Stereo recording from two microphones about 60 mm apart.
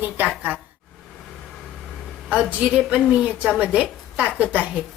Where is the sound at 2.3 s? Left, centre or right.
Right.